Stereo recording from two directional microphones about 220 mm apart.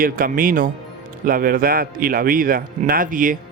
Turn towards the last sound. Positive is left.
turn(degrees=-40)  # may be behind; listen again after turning